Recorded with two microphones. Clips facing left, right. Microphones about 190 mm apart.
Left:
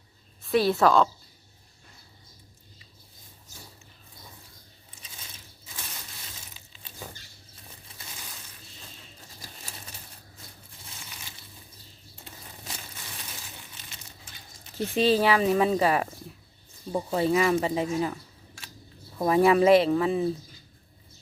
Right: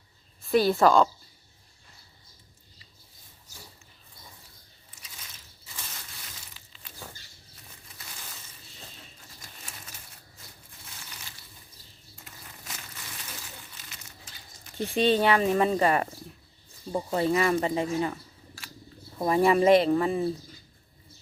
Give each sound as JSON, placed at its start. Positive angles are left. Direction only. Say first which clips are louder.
{"t": 0.4, "sound": "speech", "louder": "right 1 dB", "side_deg": 0}
{"t": 12.2, "sound": "a sound", "louder": "left 3 dB", "side_deg": 30}
{"t": 14.9, "sound": "speech", "louder": "even", "side_deg": 0}
{"t": 19.2, "sound": "speech", "louder": "left 2 dB", "side_deg": 0}